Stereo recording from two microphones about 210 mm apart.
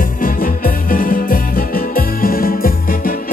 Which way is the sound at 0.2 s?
40° left (ahead or behind).